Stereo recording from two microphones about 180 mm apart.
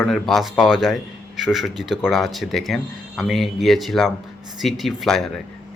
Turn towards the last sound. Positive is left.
turn(degrees=0)  # may be behind; listen again after turning